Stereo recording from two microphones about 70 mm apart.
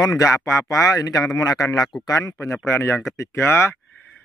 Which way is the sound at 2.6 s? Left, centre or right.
Left.